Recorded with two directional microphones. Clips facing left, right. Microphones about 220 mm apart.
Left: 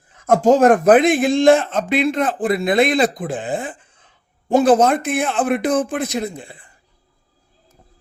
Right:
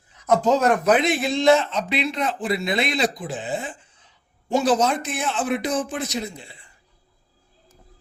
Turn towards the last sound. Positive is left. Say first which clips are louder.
# left 7 dB
turn(degrees=50)  # may be behind; listen again after turning